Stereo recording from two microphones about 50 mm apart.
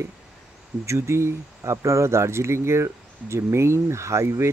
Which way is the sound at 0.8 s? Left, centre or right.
Right.